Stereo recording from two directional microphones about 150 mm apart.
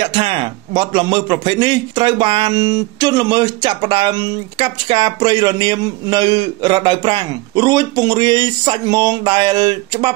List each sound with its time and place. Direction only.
0.0 s a man's voice: 35° right (ahead or behind)